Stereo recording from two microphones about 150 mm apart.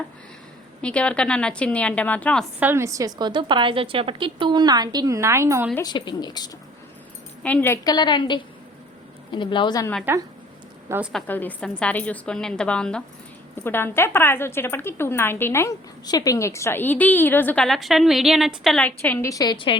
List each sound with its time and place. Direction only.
0.8 s speech: 5° left (ahead or behind)
2.6 s a woman's voice: 15° right (ahead or behind)
5.8 s speech: 30° left (ahead or behind)
7.4 s speech: 10° left (ahead or behind)
7.9 s a woman's voice: 30° left (ahead or behind)
10.1 s a woman's voice: 15° right (ahead or behind)
11.1 s speech: 10° left (ahead or behind)
18.8 s speech: 10° left (ahead or behind)
19.3 s speech: 25° left (ahead or behind)